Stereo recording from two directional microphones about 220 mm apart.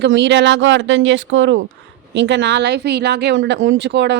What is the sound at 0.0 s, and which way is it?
Speech, 50° right (ahead or behind).